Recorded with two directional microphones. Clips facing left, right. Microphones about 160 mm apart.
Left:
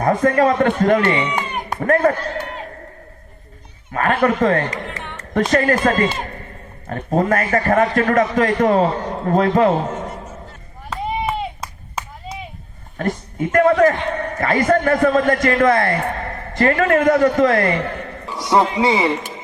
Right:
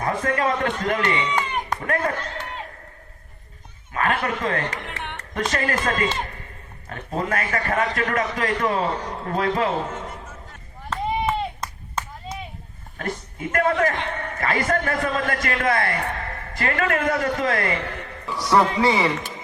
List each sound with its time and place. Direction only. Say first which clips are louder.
0.0 s a man's voice: left 8 dB; 40° left (ahead or behind)
3.9 s a man's voice: left 7 dB; 45° left (ahead or behind)
10.8 s clapping: left 1 dB; 5° left (ahead or behind)
13.0 s a woman's voice: left 7 dB; 40° left (ahead or behind)
14.2 s a man's voice: left 6 dB; 35° left (ahead or behind)
18.3 s speech: left 2 dB; 25° left (ahead or behind)